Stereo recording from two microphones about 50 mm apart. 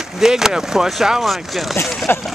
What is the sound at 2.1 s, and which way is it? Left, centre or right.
Speech, left.